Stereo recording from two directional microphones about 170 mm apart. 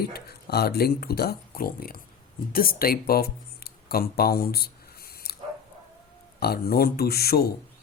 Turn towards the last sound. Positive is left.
turn(degrees=65)  # may be behind; listen again after turning